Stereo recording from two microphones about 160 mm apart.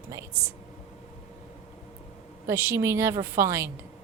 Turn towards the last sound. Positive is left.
turn(degrees=-20)  # may be behind; listen again after turning